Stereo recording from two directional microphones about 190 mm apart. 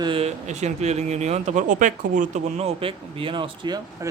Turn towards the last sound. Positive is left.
turn(degrees=-25)  # may be behind; listen again after turning